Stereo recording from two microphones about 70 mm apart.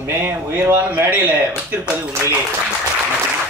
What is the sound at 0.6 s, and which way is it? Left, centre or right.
Speech, right.